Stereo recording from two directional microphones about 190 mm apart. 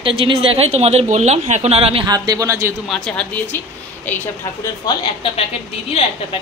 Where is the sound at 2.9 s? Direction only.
5° left (ahead or behind).